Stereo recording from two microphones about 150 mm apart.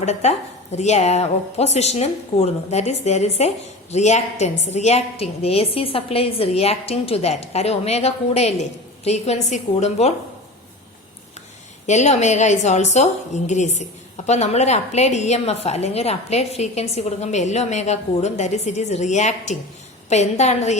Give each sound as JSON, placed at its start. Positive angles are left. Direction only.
{"t": 0.0, "sound": "a woman's voice", "side_deg": 50}
{"t": 11.9, "sound": "a woman's voice", "side_deg": 50}